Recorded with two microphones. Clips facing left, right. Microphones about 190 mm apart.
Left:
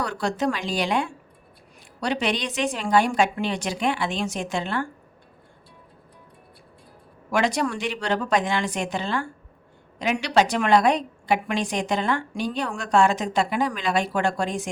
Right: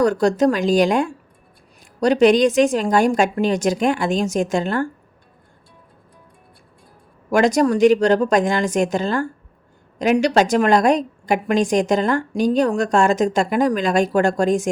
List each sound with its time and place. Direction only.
0.0 s a woman's voice: 45° right (ahead or behind)
7.3 s a woman's voice: 45° right (ahead or behind)